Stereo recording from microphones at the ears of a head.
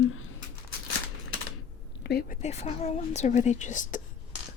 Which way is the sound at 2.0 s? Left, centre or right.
Left.